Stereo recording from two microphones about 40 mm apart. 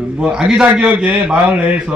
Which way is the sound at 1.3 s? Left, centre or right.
Right.